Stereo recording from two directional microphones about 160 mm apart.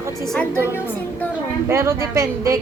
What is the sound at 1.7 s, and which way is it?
Speech, 15° right (ahead or behind).